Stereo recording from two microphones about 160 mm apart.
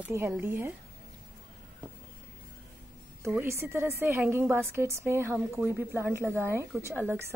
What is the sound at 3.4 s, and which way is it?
A woman's voice, 15° right (ahead or behind).